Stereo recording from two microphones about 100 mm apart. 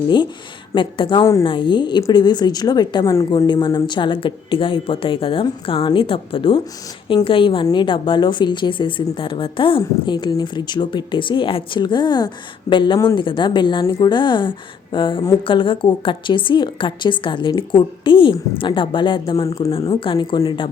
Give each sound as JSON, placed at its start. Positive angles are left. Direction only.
{"t": 0.7, "sound": "a woman's voice", "side_deg": 55}
{"t": 1.2, "sound": "a woman's voice", "side_deg": 30}
{"t": 1.5, "sound": "a woman's voice", "side_deg": 50}
{"t": 3.4, "sound": "a woman's voice", "side_deg": 50}
{"t": 19.8, "sound": "a woman's voice", "side_deg": 50}